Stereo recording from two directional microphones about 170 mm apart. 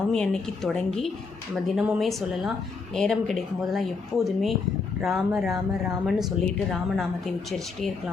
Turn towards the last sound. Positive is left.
turn(degrees=0)  # may be behind; listen again after turning